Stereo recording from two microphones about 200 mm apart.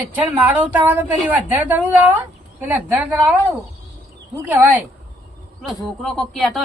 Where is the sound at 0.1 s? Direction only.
10° right (ahead or behind).